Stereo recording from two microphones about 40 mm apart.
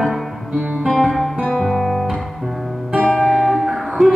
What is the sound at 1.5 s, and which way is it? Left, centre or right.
Guitar, centre.